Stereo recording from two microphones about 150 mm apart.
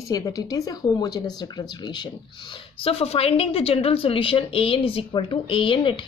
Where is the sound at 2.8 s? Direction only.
40° left (ahead or behind).